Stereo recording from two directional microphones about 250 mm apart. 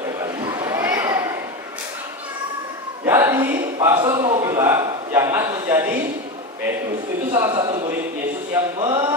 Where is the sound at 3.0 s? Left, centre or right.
Centre.